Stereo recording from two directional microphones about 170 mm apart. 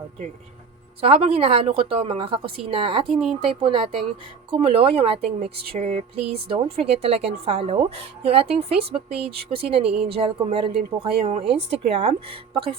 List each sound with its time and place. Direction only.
1.0 s a woman's voice: 35° right (ahead or behind)
3.1 s speech: centre (ahead or behind)
3.4 s a woman's voice: 30° right (ahead or behind)